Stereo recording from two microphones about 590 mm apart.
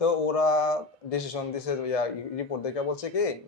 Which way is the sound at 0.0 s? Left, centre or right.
Left.